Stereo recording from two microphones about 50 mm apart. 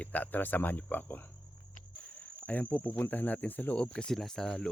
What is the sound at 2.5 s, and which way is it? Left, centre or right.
Speech, left.